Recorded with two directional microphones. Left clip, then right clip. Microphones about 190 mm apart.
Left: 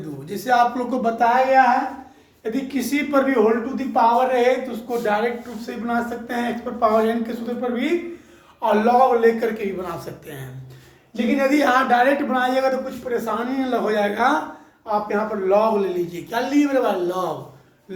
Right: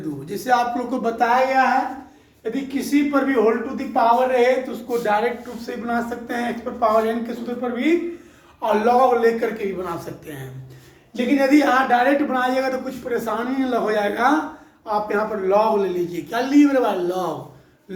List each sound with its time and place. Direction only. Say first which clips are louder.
0.3 s speech: left 2 dB; centre (ahead or behind)
2.4 s a woman's voice: even; 30° left (ahead or behind)
3.9 s speech: even; 15° left (ahead or behind)
4.9 s a man's voice: right 1 dB; centre (ahead or behind)
8.6 s a man's voice: even; centre (ahead or behind)